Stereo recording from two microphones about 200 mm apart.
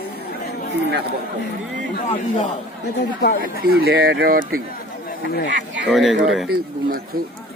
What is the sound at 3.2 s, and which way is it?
Speech, 55° left (ahead or behind).